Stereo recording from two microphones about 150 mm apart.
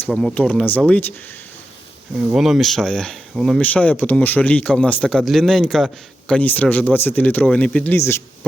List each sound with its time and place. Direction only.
0.1 s speech: centre (ahead or behind)
2.1 s speech: 5° right (ahead or behind); by 8.2 s 15° left (ahead or behind)